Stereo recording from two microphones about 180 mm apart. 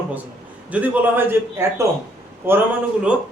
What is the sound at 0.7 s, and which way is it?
Speech, 10° right (ahead or behind).